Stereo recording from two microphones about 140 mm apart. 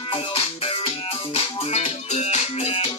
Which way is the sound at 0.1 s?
40° left (ahead or behind).